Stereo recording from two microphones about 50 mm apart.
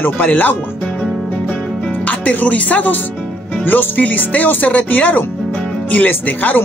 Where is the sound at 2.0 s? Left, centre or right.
Left.